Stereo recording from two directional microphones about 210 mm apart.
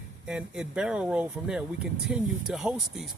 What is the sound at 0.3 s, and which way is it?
Speech, 5° right (ahead or behind).